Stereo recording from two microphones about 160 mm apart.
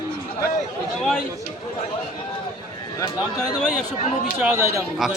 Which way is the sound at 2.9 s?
25° left (ahead or behind).